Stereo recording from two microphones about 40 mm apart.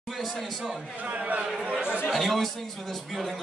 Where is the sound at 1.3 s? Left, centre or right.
Right.